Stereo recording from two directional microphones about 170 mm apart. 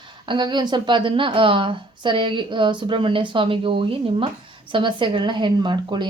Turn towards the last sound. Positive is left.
turn(degrees=-25)  # may be behind; listen again after turning